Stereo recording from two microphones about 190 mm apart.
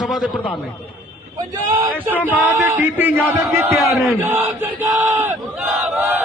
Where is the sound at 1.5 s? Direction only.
10° right (ahead or behind).